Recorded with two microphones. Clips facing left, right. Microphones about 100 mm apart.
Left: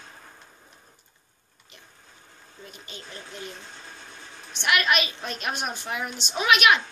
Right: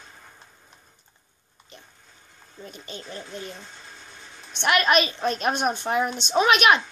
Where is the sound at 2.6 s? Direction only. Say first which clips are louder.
Right 5 dB; 35° right (ahead or behind).